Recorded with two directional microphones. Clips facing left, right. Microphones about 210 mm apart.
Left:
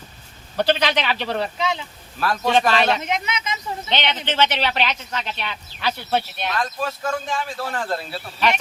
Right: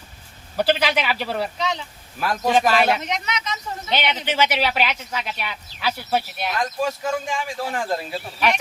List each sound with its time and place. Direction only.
0.5 s speech: 5° right (ahead or behind)
3.1 s speech: 5° left (ahead or behind)
3.8 s speech: 10° right (ahead or behind)